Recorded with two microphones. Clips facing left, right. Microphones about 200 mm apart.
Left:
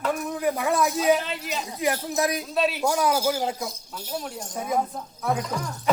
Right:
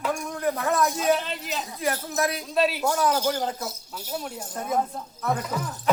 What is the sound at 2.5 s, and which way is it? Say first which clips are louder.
Speech: right 3 dB; centre (ahead or behind).